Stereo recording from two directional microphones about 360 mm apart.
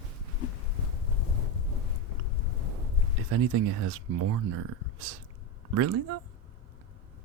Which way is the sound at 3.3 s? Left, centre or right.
Right.